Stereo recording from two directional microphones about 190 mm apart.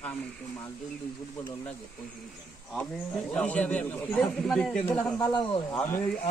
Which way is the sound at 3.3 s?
5° left (ahead or behind).